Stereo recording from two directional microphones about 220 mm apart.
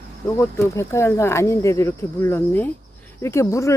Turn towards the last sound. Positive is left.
turn(degrees=15)  # may be behind; listen again after turning